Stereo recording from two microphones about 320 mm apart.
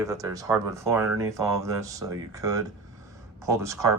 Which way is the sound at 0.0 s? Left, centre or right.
Centre.